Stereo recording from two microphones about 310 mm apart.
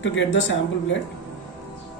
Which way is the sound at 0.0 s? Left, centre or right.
Left.